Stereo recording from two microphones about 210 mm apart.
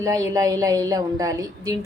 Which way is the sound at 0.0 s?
15° right (ahead or behind).